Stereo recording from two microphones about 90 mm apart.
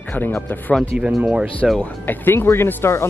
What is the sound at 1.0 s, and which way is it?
Speech, 10° right (ahead or behind).